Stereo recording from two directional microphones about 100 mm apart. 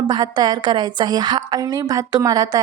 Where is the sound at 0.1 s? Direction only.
45° right (ahead or behind).